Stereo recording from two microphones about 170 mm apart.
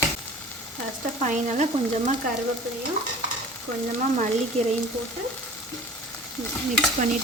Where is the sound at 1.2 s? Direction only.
40° right (ahead or behind).